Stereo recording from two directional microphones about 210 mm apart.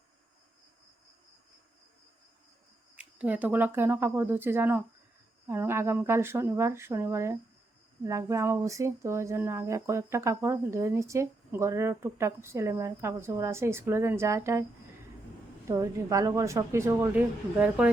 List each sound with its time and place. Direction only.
2.9 s speech: 5° right (ahead or behind)
15.7 s speech: 15° right (ahead or behind)